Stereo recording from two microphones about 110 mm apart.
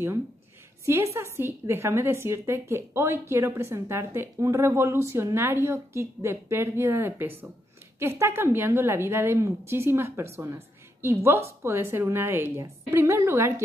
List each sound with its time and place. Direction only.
0.8 s a woman's voice: 25° right (ahead or behind)